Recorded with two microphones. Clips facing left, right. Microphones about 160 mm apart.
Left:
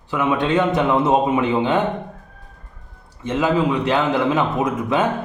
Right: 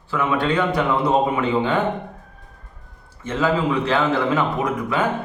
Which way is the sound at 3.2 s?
15° left (ahead or behind).